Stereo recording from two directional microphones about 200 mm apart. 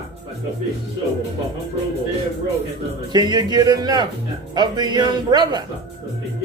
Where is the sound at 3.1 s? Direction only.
20° right (ahead or behind).